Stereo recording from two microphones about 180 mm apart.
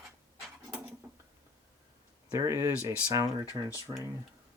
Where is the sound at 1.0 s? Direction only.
15° right (ahead or behind).